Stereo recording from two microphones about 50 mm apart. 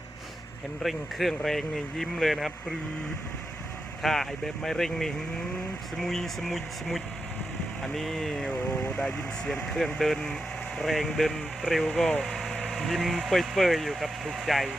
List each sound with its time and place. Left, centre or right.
0.8 s speech: centre
4.0 s speech: centre
8.7 s speech: left
9.7 s speech: centre